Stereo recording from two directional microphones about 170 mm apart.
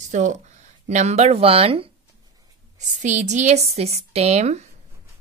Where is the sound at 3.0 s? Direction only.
45° right (ahead or behind).